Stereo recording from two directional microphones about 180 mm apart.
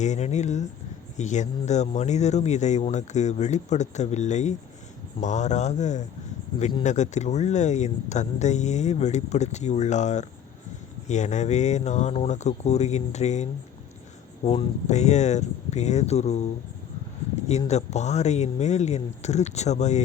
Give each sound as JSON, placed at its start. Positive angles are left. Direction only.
{"t": 0.0, "sound": "speech", "side_deg": 40}
{"t": 6.6, "sound": "speech", "side_deg": 30}
{"t": 6.8, "sound": "speech", "side_deg": 40}
{"t": 17.7, "sound": "speech", "side_deg": 40}